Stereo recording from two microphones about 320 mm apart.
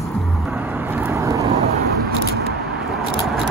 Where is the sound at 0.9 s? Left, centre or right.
Centre.